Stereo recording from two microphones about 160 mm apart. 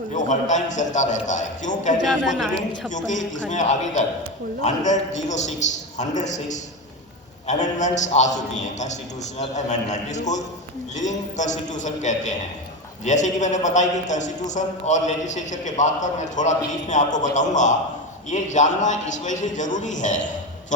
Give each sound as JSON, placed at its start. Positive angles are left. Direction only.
{"t": 0.2, "sound": "a man's voice", "side_deg": 50}